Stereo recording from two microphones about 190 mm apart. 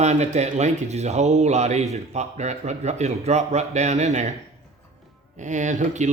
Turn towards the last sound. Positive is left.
turn(degrees=-40)  # may be behind; listen again after turning